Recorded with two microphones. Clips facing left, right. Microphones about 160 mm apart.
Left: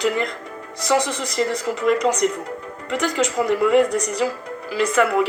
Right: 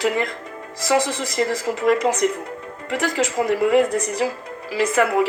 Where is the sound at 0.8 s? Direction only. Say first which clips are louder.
Even; 50° right (ahead or behind).